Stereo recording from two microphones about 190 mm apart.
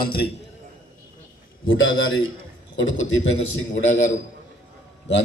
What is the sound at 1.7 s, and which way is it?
Speech, 90° left.